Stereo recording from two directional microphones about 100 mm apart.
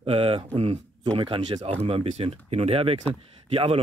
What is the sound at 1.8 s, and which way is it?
Speech, 75° right (ahead or behind).